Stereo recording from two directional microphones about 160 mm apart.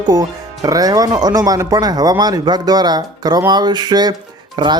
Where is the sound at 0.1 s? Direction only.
25° right (ahead or behind).